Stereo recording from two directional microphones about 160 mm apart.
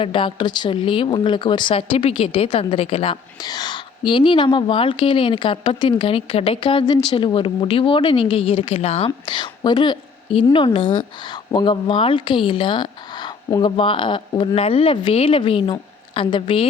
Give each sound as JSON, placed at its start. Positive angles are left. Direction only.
{"t": 0.0, "sound": "speech", "side_deg": 30}